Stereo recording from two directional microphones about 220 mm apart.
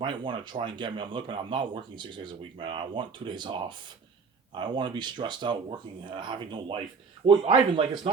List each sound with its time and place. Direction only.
0.0 s speech: 20° right (ahead or behind)